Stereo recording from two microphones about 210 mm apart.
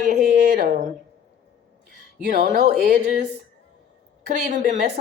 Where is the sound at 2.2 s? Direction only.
40° right (ahead or behind).